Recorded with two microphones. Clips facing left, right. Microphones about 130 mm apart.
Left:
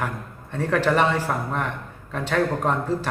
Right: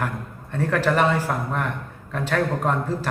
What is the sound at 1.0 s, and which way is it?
A man's voice, 5° right (ahead or behind).